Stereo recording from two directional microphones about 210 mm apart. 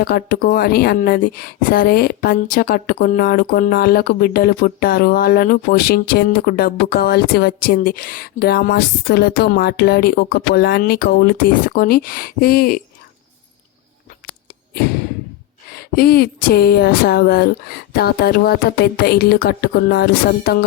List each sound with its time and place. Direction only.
0.0 s a woman's voice: 45° left (ahead or behind)
15.8 s a woman's voice: 45° left (ahead or behind)